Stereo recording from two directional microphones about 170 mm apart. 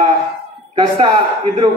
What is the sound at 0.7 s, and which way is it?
Speech, 25° right (ahead or behind).